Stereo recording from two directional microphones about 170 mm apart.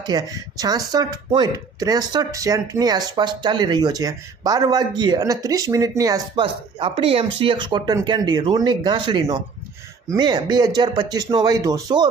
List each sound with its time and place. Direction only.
0.0 s speech: 25° right (ahead or behind)
6.4 s speech: 30° right (ahead or behind)